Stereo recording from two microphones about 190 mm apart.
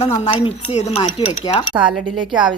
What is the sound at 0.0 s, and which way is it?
Speech, 35° left (ahead or behind).